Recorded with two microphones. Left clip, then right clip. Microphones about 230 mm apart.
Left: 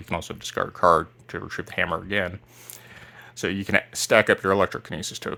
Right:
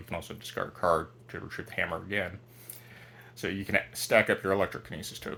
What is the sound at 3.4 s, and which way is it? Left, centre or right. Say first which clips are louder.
Speech: left 6 dB; left.